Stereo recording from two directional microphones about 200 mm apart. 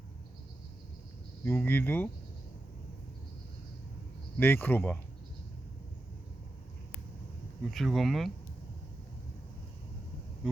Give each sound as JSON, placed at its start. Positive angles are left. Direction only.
{"t": 1.5, "sound": "speech", "side_deg": 10}
{"t": 4.4, "sound": "speech", "side_deg": 10}
{"t": 7.7, "sound": "speech", "side_deg": 0}